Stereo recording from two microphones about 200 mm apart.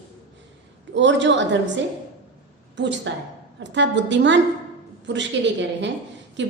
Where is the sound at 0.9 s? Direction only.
65° right (ahead or behind).